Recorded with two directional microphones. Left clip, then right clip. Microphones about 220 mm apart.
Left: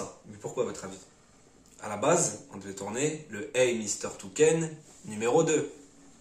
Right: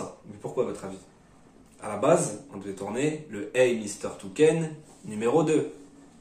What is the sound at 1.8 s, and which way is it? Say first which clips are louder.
Speech: right 3 dB; 20° left (ahead or behind).